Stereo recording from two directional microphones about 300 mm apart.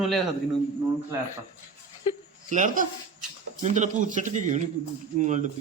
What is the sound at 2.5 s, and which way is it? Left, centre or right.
Speech, right.